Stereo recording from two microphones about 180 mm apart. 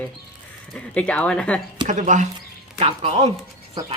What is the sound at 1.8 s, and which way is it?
Speech, 45° right (ahead or behind).